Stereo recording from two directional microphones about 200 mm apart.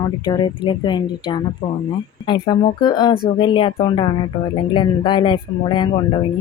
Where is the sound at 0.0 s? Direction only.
20° left (ahead or behind).